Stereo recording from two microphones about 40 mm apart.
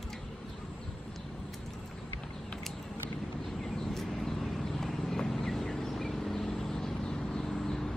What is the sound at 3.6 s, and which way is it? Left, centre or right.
Vehicle, centre.